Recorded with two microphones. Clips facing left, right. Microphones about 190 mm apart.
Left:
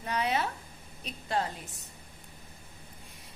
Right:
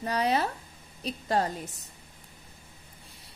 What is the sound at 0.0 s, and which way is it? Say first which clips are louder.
A woman's voice: right 4 dB; 35° right (ahead or behind).